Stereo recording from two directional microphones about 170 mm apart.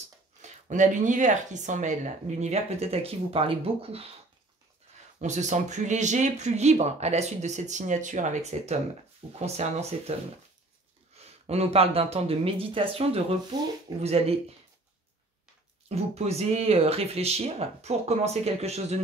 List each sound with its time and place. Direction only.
0.4 s speech: 45° right (ahead or behind)
5.2 s speech: 45° right (ahead or behind)
11.4 s speech: 35° right (ahead or behind)
15.9 s speech: 40° right (ahead or behind)